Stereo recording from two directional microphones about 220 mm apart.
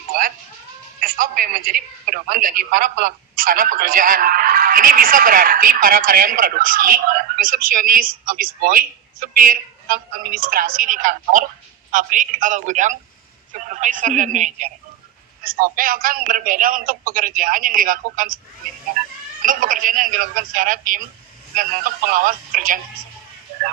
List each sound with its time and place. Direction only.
1.0 s speech: 40° right (ahead or behind)
19.4 s speech: 40° right (ahead or behind)